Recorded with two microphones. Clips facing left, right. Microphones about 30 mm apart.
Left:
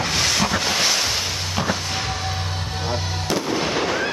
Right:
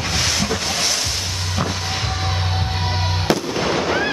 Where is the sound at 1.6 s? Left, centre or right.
Centre.